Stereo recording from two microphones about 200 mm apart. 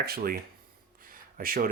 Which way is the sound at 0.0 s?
50° right (ahead or behind).